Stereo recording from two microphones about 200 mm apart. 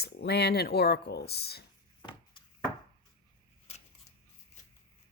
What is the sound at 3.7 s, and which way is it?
Camera, 30° left (ahead or behind).